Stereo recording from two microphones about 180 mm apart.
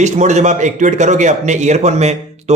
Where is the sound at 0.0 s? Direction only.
40° right (ahead or behind).